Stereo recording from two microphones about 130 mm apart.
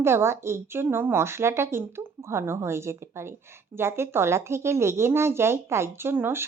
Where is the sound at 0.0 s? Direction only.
20° right (ahead or behind).